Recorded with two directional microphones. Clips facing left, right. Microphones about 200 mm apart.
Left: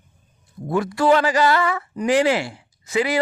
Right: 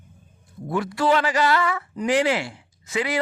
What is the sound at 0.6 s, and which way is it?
Speech, 45° left (ahead or behind).